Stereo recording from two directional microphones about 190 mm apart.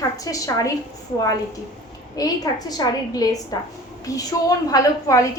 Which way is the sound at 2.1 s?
20° left (ahead or behind).